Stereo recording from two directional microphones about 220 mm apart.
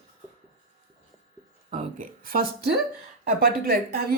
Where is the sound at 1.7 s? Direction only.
35° right (ahead or behind).